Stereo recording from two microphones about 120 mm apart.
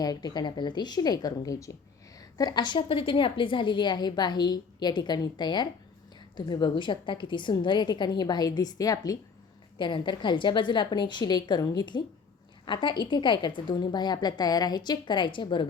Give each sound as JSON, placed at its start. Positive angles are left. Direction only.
{"t": 0.0, "sound": "a woman's voice", "side_deg": 35}